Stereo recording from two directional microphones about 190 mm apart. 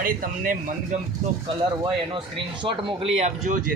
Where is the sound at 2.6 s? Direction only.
25° right (ahead or behind).